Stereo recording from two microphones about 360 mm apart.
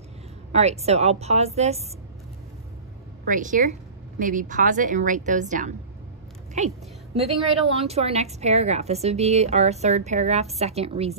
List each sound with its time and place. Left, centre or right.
0.5 s a woman's voice: centre
3.3 s a woman's voice: right